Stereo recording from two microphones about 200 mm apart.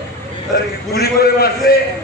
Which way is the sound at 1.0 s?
50° left (ahead or behind).